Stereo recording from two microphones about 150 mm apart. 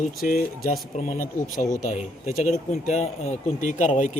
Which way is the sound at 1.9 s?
55° left (ahead or behind).